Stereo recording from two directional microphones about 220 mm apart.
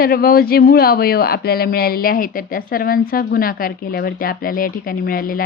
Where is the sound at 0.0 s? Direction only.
40° left (ahead or behind).